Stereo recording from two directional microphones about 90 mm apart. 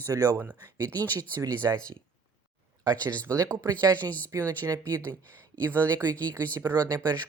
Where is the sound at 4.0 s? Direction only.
20° left (ahead or behind).